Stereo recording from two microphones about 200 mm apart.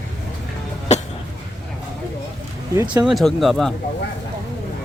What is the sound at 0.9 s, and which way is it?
Cough, 35° left (ahead or behind).